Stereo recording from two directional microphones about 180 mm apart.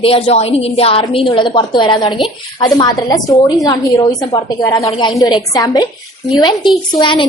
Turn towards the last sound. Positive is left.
turn(degrees=25)  # may be behind; listen again after turning